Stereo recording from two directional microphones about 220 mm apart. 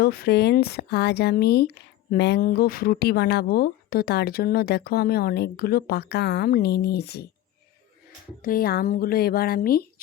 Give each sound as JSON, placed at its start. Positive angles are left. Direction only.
{"t": 0.0, "sound": "speech", "side_deg": 45}
{"t": 8.4, "sound": "speech", "side_deg": 40}